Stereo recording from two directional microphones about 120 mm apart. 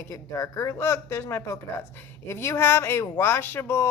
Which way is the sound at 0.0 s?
25° left (ahead or behind).